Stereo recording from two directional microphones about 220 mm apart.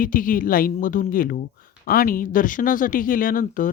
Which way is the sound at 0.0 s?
40° left (ahead or behind).